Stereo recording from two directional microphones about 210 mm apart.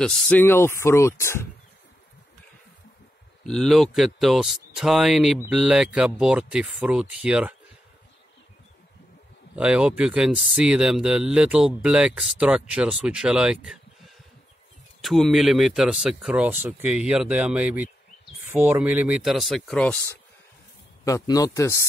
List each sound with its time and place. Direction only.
0.0 s speech: 5° left (ahead or behind)
3.4 s speech: centre (ahead or behind)
9.6 s speech: 5° right (ahead or behind)
21.0 s speech: 15° left (ahead or behind)